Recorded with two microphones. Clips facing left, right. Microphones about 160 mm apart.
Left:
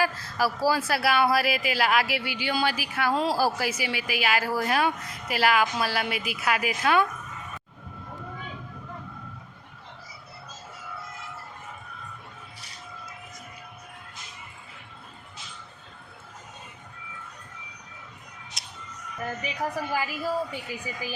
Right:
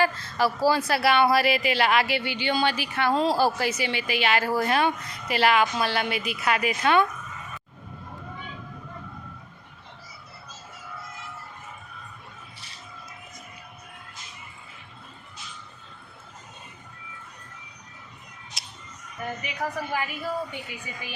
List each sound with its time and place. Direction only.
0.0 s speech: 5° left (ahead or behind)
18.6 s music: 5° right (ahead or behind)
19.9 s a woman's voice: 35° left (ahead or behind)